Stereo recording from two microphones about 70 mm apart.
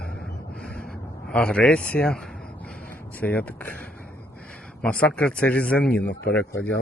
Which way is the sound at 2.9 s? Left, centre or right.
Left.